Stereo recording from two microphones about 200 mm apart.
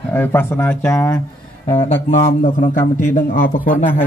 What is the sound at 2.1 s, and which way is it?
A man's voice, 40° left (ahead or behind).